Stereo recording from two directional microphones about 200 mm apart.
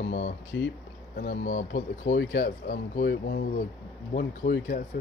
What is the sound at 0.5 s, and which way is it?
Speech, 60° left (ahead or behind).